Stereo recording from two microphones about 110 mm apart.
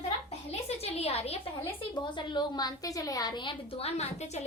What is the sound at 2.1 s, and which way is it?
A woman's voice, 45° left (ahead or behind).